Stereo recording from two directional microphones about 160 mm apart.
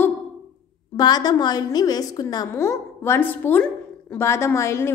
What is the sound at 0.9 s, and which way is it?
A woman's voice, 25° left (ahead or behind).